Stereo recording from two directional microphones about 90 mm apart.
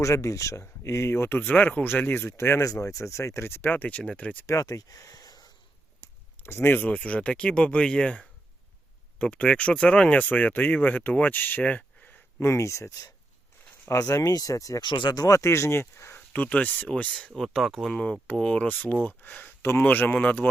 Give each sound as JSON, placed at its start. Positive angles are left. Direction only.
{"t": 0.0, "sound": "speech", "side_deg": 35}
{"t": 4.4, "sound": "speech", "side_deg": 40}
{"t": 6.4, "sound": "speech", "side_deg": 25}
{"t": 12.4, "sound": "speech", "side_deg": 30}
{"t": 14.8, "sound": "speech", "side_deg": 55}
{"t": 17.4, "sound": "speech", "side_deg": 0}